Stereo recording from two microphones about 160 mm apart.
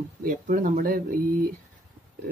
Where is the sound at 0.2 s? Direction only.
60° right (ahead or behind).